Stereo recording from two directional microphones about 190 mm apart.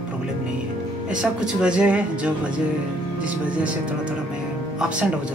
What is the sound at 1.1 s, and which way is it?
Speech, 5° right (ahead or behind).